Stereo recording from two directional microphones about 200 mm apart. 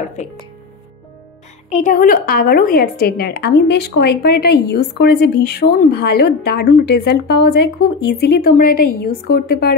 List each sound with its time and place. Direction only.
0.2 s speech: 35° left (ahead or behind)
1.7 s a woman's voice: 40° left (ahead or behind)